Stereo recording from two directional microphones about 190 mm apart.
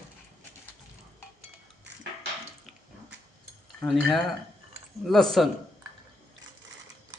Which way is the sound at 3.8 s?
Centre (ahead or behind).